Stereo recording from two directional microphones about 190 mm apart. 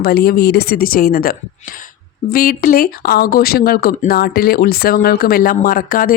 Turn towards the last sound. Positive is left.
turn(degrees=50)  # may be behind; listen again after turning